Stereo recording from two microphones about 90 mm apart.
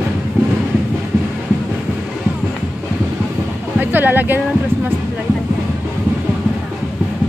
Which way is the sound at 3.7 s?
20° right (ahead or behind).